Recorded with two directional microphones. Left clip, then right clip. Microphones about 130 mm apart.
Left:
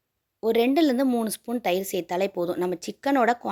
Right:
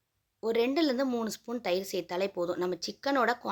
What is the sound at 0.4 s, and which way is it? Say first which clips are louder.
Speech: left 6 dB; 40° left (ahead or behind).